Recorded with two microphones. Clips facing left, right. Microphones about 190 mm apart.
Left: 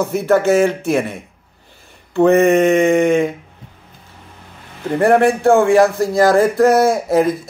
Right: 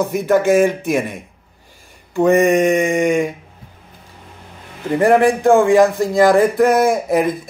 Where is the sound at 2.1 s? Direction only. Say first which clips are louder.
Left 2 dB; 10° right (ahead or behind).